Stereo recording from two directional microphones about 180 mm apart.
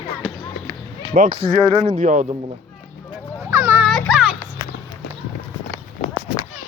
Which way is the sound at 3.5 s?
15° right (ahead or behind).